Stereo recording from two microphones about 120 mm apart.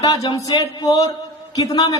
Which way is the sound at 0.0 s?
30° left (ahead or behind).